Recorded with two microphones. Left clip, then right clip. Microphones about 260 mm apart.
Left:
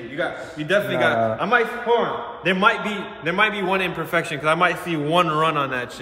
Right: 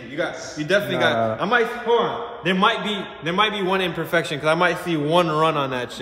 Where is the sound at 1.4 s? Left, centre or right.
Right.